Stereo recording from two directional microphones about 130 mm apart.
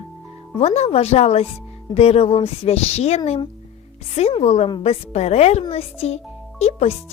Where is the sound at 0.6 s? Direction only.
55° left (ahead or behind).